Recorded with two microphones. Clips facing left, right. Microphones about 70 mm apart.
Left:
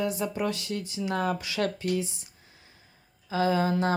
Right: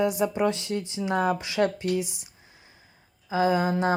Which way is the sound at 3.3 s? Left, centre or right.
Centre.